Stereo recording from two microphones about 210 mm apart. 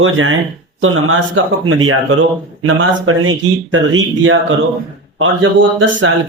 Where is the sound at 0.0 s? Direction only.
70° right (ahead or behind).